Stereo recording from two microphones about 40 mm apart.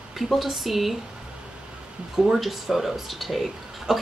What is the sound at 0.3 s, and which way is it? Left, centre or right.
Speech, centre.